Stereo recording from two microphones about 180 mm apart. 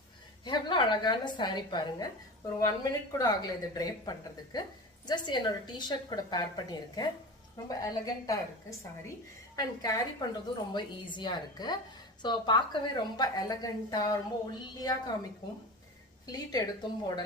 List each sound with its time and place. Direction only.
0.4 s a woman's voice: 25° left (ahead or behind)
9.6 s a woman's voice: 20° left (ahead or behind)
16.2 s a woman's voice: 20° left (ahead or behind)